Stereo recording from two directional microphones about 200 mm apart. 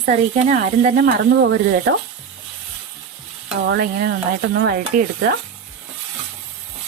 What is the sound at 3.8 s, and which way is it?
Speech, 45° right (ahead or behind).